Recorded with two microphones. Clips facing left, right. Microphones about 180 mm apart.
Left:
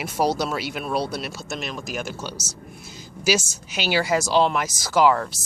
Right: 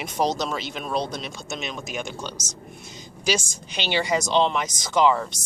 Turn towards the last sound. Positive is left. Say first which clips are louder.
# left 1 dB
turn(degrees=5)  # may be behind; listen again after turning